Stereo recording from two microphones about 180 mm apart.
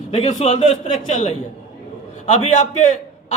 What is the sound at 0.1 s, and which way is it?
Speech, 40° left (ahead or behind).